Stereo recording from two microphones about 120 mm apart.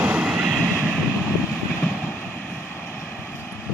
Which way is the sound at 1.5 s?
5° left (ahead or behind).